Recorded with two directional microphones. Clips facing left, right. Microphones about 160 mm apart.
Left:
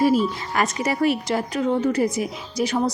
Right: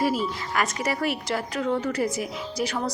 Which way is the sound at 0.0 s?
25° left (ahead or behind).